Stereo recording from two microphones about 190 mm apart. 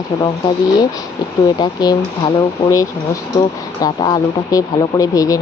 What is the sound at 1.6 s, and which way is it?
Speech, 25° left (ahead or behind).